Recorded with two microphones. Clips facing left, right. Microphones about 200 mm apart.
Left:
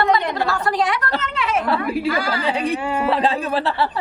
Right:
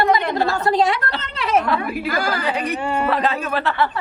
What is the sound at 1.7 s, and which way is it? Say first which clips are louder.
Speech: left 2 dB; 30° left (ahead or behind).